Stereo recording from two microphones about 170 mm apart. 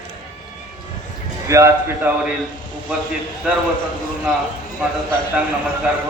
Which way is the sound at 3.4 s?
5° right (ahead or behind).